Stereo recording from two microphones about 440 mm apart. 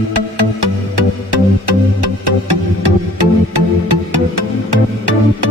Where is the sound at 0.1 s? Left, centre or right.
Right.